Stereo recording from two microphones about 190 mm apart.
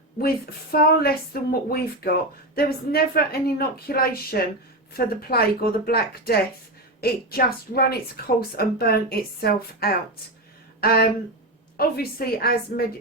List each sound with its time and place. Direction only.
0.2 s a woman's voice: 50° left (ahead or behind)
10.8 s a sound: 55° left (ahead or behind)
11.8 s a woman's voice: 55° left (ahead or behind)